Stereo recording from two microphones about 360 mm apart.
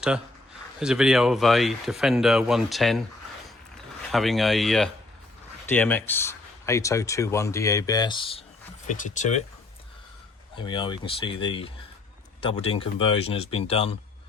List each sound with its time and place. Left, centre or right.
0.8 s speech: centre
4.1 s speech: centre
10.5 s speech: centre